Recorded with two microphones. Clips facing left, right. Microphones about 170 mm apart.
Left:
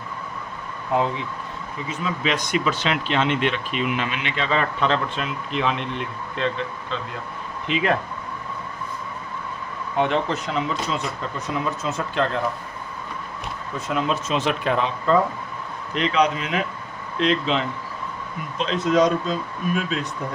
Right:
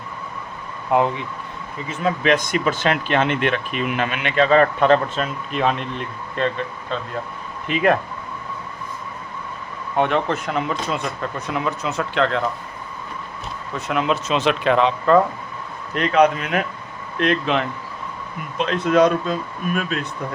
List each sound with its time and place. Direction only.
0.9 s speech: 70° right (ahead or behind)
2.0 s speech: 55° right (ahead or behind)
7.7 s speech: 50° right (ahead or behind)
10.0 s speech: 55° right (ahead or behind); by 12.4 s 75° right (ahead or behind)
13.8 s speech: 70° right (ahead or behind)
16.0 s speech: 55° right (ahead or behind)